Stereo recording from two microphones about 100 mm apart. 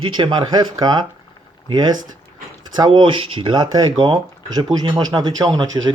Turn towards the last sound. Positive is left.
turn(degrees=-45)  # may be behind; listen again after turning